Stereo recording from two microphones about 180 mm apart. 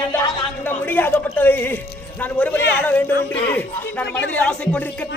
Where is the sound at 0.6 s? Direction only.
10° left (ahead or behind).